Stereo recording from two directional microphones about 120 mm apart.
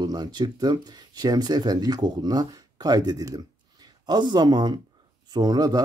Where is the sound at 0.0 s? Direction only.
35° right (ahead or behind).